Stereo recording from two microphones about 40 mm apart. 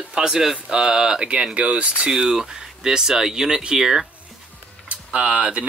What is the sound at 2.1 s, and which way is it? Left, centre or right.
Speech, centre.